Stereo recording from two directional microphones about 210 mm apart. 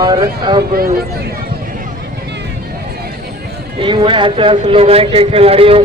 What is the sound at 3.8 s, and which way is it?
Speech, 25° right (ahead or behind).